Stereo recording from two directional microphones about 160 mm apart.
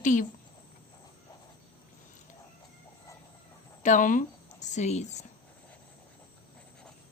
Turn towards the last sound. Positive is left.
turn(degrees=45)  # may be behind; listen again after turning